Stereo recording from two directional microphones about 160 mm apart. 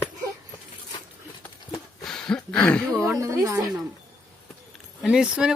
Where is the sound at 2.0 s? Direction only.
5° left (ahead or behind).